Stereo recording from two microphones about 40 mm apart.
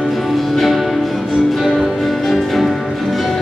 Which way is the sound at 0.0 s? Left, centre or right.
Centre.